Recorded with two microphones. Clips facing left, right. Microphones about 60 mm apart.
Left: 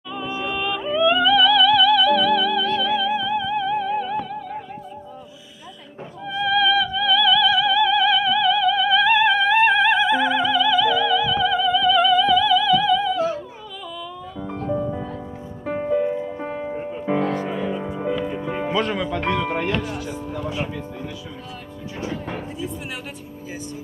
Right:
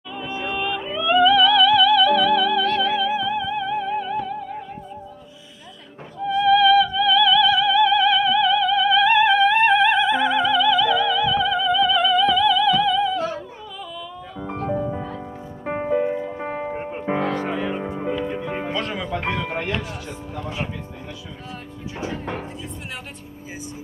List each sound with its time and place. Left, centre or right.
0.4 s yodeling: centre
0.7 s music: centre
6.2 s opera: centre
14.5 s music: right
14.8 s music: centre
15.6 s music: right
16.7 s music: right
18.7 s music: centre